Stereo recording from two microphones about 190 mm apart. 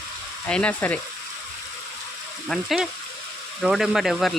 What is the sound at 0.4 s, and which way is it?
Frying, 5° left (ahead or behind).